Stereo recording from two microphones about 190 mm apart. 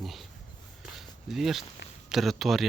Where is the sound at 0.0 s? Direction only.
Centre (ahead or behind).